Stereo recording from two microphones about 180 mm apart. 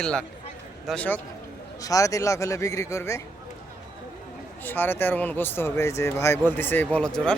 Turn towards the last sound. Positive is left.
turn(degrees=5)  # may be behind; listen again after turning